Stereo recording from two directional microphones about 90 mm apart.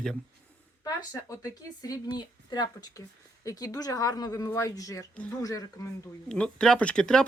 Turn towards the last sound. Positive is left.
turn(degrees=10)  # may be behind; listen again after turning